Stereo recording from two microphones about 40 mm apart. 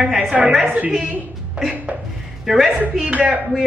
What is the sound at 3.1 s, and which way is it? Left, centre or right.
Speech, right.